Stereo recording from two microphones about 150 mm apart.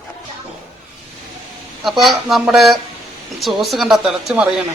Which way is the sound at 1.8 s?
Centre (ahead or behind).